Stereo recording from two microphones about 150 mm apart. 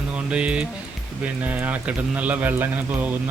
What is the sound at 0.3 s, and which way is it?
Speech, 5° right (ahead or behind).